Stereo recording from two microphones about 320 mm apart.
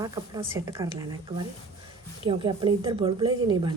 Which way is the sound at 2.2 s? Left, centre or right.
Centre.